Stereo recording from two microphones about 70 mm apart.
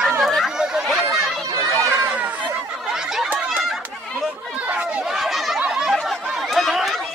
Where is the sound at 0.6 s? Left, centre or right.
Centre.